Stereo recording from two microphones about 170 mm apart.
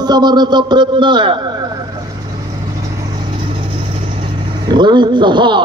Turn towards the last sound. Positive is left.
turn(degrees=-25)  # may be behind; listen again after turning